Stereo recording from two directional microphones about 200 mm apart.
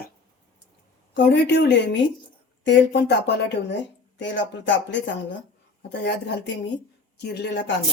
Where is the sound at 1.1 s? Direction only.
60° left (ahead or behind).